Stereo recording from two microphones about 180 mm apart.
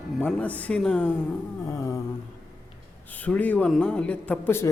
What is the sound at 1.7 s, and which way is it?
Speech, 15° left (ahead or behind).